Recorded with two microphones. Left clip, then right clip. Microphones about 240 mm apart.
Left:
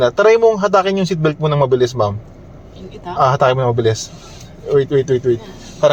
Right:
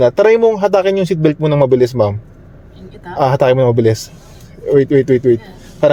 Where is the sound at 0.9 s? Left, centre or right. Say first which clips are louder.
Right 3 dB; right.